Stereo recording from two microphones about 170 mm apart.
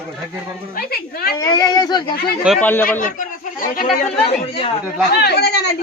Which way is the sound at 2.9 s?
50° left (ahead or behind).